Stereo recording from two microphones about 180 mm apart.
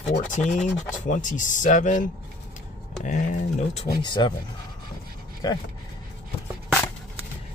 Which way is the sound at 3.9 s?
25° left (ahead or behind).